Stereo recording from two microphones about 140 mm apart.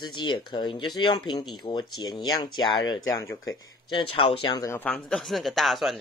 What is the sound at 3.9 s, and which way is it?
Speech, 40° left (ahead or behind).